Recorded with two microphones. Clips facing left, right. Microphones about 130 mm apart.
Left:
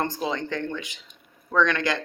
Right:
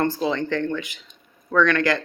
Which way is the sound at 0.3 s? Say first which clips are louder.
Right 5 dB; 20° left (ahead or behind).